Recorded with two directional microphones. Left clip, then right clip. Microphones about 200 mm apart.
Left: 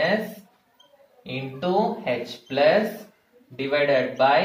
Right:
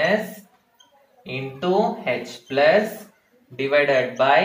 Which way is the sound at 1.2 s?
5° right (ahead or behind).